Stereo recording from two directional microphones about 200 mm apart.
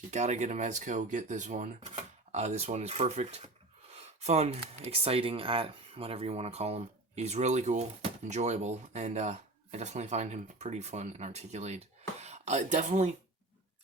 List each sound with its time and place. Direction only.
0.1 s speech: 35° right (ahead or behind)